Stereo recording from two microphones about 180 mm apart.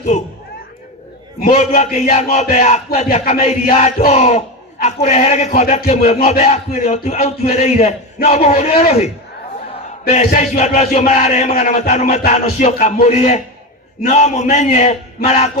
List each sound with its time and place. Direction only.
1.5 s a man's voice: 40° left (ahead or behind)